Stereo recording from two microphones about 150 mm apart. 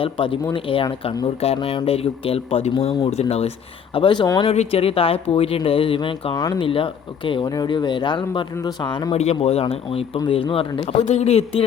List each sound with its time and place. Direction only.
0.0 s speech: 35° left (ahead or behind)
3.9 s speech: 35° left (ahead or behind)
4.5 s speech: 45° left (ahead or behind)
6.3 s speech: 25° left (ahead or behind)
6.7 s speech: 35° left (ahead or behind)
9.1 s speech: 45° left (ahead or behind)